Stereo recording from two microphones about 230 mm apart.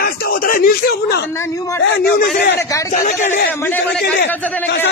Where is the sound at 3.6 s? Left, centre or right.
Centre.